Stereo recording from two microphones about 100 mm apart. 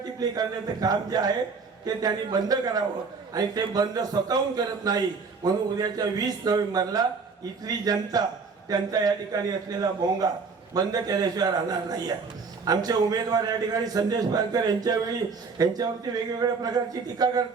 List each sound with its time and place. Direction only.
0.0 s a man's voice: 40° right (ahead or behind)